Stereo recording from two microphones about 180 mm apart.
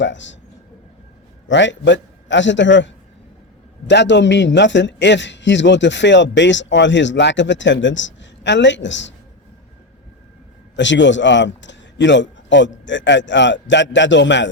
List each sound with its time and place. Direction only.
0.0 s a man's voice: 90° left
1.5 s a man's voice: 90° left
3.8 s a man's voice: 80° left
10.8 s a man's voice: 90° left